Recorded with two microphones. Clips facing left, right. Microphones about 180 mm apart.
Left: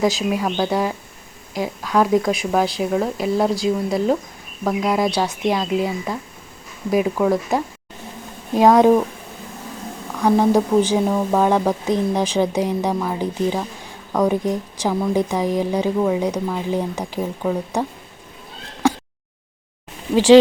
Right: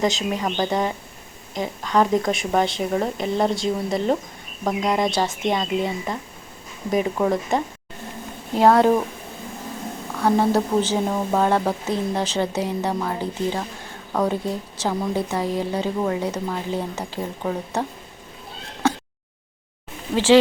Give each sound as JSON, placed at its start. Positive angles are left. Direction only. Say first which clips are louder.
{"t": 0.0, "sound": "a woman's voice", "louder": "left 3 dB", "side_deg": 5}
{"t": 8.5, "sound": "a woman's voice", "louder": "left 3 dB", "side_deg": 15}
{"t": 10.2, "sound": "a woman's voice", "louder": "left 3 dB", "side_deg": 15}
{"t": 20.1, "sound": "a woman's voice", "louder": "left 5 dB", "side_deg": 15}